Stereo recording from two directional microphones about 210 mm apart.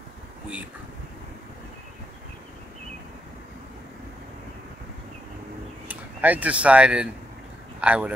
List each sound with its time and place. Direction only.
5.9 s a man's voice: 5° right (ahead or behind)